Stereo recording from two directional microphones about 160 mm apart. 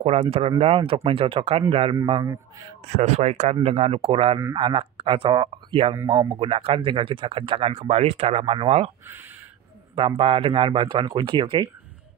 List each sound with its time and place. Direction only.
0.0 s a man's voice: 40° right (ahead or behind)
2.9 s speech: 45° right (ahead or behind)
9.9 s speech: 35° right (ahead or behind)